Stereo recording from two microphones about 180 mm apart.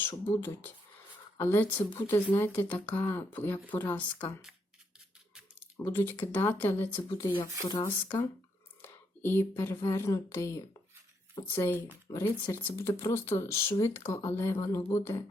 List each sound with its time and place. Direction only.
0.3 s speech: 10° left (ahead or behind)
5.8 s speech: 10° left (ahead or behind)